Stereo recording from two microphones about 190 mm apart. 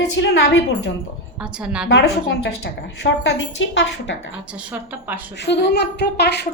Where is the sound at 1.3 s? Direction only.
5° right (ahead or behind).